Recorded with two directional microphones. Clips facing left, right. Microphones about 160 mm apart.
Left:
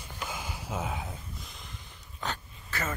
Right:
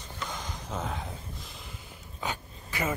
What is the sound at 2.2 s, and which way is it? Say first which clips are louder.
Dog: right 1 dB; 10° right (ahead or behind).